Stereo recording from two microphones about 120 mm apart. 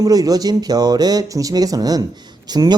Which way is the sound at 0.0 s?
30° right (ahead or behind).